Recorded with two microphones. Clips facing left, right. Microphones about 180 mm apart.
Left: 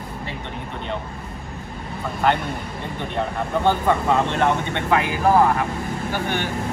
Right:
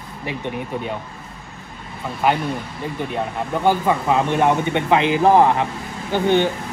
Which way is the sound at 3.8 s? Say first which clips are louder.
Right 1 dB; 15° right (ahead or behind).